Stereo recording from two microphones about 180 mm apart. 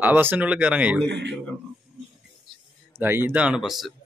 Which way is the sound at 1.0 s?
70° right (ahead or behind).